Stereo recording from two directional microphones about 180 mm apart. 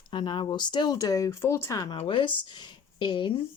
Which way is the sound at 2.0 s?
30° left (ahead or behind).